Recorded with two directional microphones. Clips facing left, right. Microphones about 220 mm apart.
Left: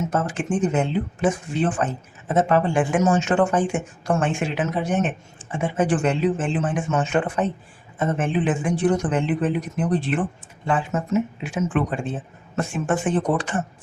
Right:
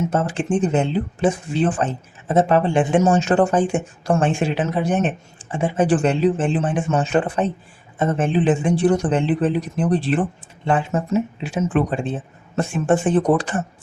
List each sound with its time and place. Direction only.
0.1 s speech: 30° right (ahead or behind)